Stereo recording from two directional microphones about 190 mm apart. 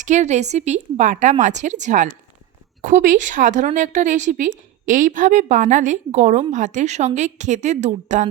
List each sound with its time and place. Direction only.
0.0 s a woman's voice: 40° right (ahead or behind)